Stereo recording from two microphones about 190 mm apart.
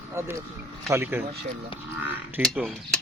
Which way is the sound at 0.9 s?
15° right (ahead or behind).